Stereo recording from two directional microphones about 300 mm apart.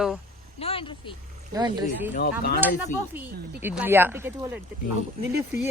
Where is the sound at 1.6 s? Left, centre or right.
Centre.